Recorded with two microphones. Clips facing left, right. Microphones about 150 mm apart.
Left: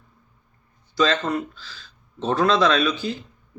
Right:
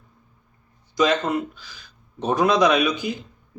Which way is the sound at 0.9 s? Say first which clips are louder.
Right 1 dB; 15° right (ahead or behind).